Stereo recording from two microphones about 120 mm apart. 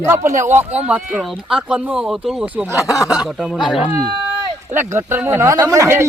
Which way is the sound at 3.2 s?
10° right (ahead or behind).